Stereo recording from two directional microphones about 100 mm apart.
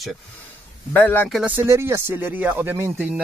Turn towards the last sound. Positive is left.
turn(degrees=-20)  # may be behind; listen again after turning